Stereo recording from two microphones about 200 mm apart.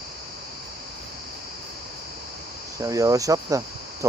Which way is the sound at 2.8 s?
15° right (ahead or behind).